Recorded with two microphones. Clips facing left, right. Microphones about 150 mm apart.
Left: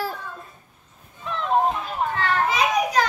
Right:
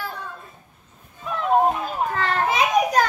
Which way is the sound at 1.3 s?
10° right (ahead or behind).